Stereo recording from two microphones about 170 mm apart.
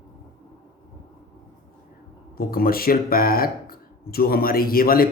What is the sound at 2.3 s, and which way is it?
Speech, 60° left (ahead or behind).